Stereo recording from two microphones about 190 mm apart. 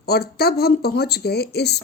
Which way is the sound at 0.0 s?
55° left (ahead or behind).